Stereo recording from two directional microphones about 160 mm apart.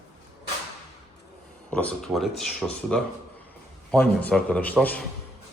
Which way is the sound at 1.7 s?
5° left (ahead or behind).